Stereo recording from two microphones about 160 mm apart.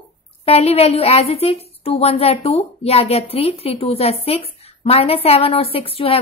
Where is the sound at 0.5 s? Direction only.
40° left (ahead or behind).